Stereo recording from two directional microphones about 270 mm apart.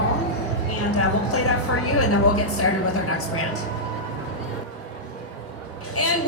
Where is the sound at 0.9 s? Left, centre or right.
Left.